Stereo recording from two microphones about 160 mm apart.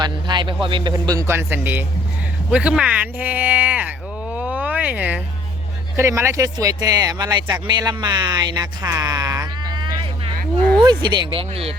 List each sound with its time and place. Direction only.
0.0 s speech: 30° right (ahead or behind)
0.9 s speech: 20° right (ahead or behind)
4.4 s a sound: 10° right (ahead or behind)
6.0 s speech: 15° right (ahead or behind)
8.8 s a sound: 20° right (ahead or behind)
10.8 s speech: 30° right (ahead or behind)